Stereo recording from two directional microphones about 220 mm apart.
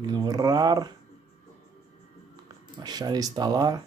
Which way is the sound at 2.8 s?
20° right (ahead or behind).